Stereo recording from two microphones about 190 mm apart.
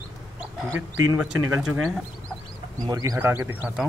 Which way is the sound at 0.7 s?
10° right (ahead or behind).